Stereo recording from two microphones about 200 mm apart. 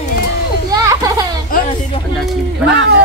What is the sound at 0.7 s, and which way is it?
Children playing, 15° right (ahead or behind).